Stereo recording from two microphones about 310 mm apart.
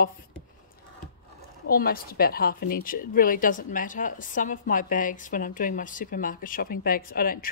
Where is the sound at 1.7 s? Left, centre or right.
Left.